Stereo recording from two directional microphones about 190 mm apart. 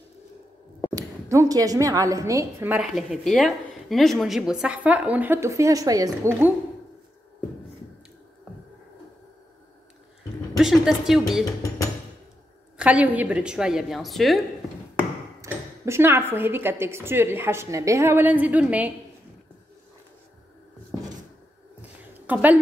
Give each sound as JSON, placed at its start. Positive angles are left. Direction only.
{"t": 0.9, "sound": "a woman's voice", "side_deg": -15}
{"t": 10.6, "sound": "a woman's voice", "side_deg": -5}
{"t": 12.7, "sound": "a woman's voice", "side_deg": -5}
{"t": 15.4, "sound": "a woman's voice", "side_deg": -15}
{"t": 22.2, "sound": "a woman's voice", "side_deg": -10}